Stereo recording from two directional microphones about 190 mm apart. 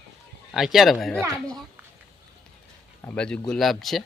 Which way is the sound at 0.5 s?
Centre (ahead or behind).